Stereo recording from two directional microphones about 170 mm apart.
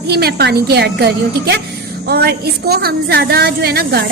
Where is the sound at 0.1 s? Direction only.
70° right (ahead or behind).